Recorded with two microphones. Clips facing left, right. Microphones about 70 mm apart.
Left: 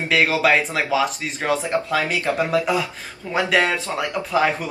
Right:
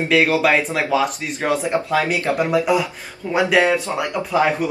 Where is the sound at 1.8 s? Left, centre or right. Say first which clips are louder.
Right 2 dB; centre.